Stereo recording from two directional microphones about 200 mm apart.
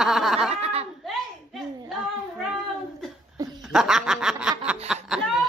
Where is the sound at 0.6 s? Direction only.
30° right (ahead or behind).